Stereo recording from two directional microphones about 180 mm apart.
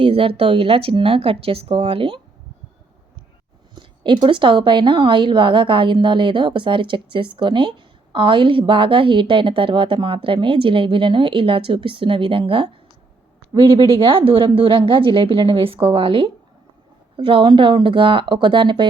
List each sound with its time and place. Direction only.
0.0 s speech: 30° right (ahead or behind)
3.8 s a woman's voice: 25° right (ahead or behind)